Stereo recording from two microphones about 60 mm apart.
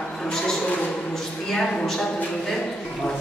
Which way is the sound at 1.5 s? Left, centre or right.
Centre.